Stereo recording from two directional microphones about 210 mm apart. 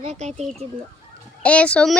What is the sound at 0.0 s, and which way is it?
Speech, 30° right (ahead or behind).